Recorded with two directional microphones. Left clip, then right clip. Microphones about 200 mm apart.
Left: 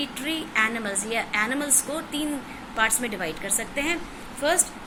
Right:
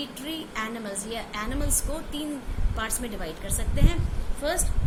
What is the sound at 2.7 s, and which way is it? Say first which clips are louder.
Speech: left 8 dB; 20° right (ahead or behind).